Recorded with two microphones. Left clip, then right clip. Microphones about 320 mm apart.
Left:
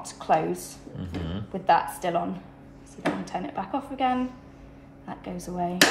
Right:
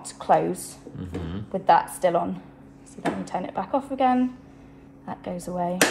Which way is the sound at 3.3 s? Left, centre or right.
Centre.